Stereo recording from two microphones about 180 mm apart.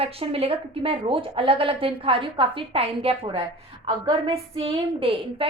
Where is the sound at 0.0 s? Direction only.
35° right (ahead or behind).